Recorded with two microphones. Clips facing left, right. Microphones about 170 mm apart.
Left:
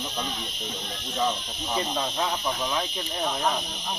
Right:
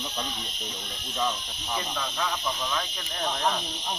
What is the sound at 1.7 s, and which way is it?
Speech, 30° left (ahead or behind).